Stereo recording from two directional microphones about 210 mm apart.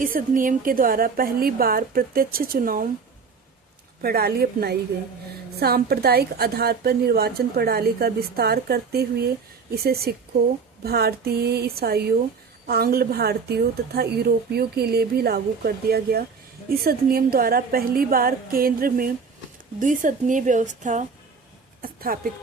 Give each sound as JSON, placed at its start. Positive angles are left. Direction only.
{"t": 0.0, "sound": "a woman's voice", "side_deg": -40}
{"t": 4.0, "sound": "a woman's voice", "side_deg": -45}
{"t": 21.8, "sound": "a woman's voice", "side_deg": -45}